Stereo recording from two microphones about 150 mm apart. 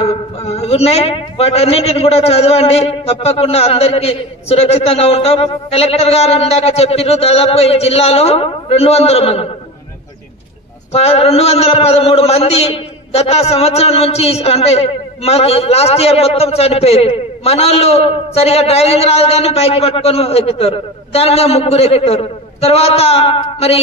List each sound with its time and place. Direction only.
0.0 s a man's voice: 45° left (ahead or behind)
10.9 s a man's voice: 45° left (ahead or behind)